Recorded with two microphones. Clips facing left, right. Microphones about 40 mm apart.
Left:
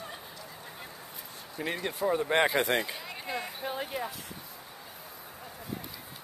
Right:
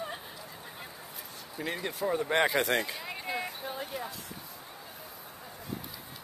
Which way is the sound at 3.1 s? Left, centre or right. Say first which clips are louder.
Right 1 dB; centre.